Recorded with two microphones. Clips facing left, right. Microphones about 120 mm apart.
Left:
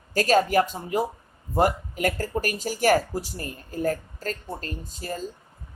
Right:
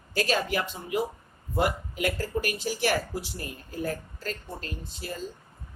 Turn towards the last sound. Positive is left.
turn(degrees=40)  # may be behind; listen again after turning